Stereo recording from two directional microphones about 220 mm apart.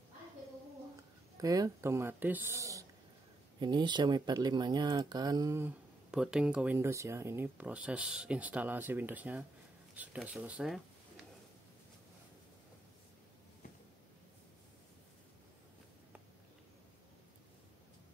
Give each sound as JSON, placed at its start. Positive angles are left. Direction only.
{"t": 1.4, "sound": "speech", "side_deg": -15}